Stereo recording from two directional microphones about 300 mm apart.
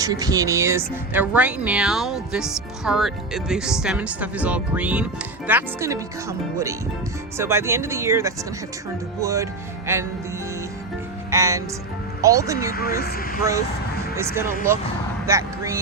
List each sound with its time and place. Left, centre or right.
0.0 s speech: centre
11.3 s speech: centre
12.7 s speech: left
15.3 s speech: centre